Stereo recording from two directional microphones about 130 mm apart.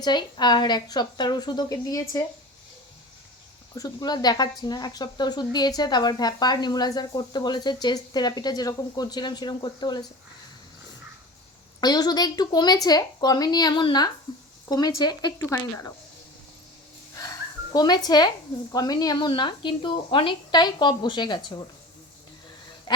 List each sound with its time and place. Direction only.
0.0 s speech: 35° left (ahead or behind)
3.8 s speech: 30° left (ahead or behind)
11.8 s speech: 30° left (ahead or behind)
15.4 s speech: 20° left (ahead or behind)
17.7 s speech: 30° left (ahead or behind)